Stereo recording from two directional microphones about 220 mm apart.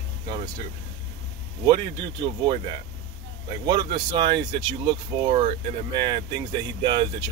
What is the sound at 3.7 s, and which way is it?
Speech, 20° right (ahead or behind).